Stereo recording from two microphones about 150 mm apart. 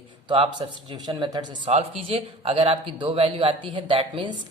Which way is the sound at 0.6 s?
35° right (ahead or behind).